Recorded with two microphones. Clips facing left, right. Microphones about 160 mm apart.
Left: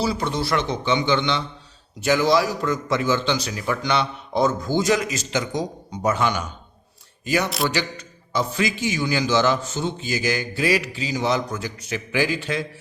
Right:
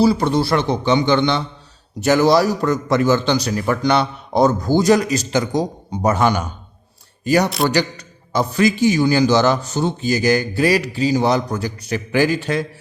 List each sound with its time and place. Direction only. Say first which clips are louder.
0.3 s a man's voice: right 6 dB; 35° right (ahead or behind)